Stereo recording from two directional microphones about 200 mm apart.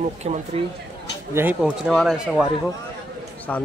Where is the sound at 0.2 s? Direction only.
35° right (ahead or behind).